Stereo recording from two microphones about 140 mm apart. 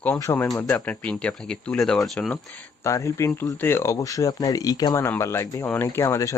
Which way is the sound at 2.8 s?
20° left (ahead or behind).